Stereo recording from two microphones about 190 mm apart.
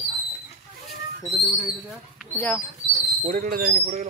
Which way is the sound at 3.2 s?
45° right (ahead or behind).